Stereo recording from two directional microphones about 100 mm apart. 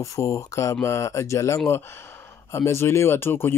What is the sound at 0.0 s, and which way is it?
Speech, 30° left (ahead or behind).